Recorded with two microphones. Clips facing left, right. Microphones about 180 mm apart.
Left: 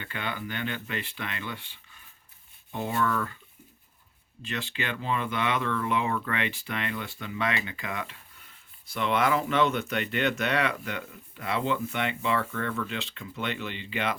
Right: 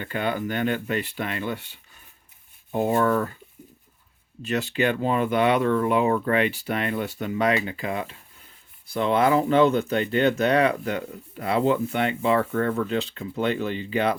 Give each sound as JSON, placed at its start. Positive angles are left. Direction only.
{"t": 0.0, "sound": "speech", "side_deg": -45}
{"t": 4.4, "sound": "speech", "side_deg": -40}